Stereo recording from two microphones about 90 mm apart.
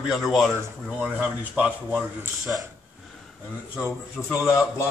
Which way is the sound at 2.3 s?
Centre (ahead or behind).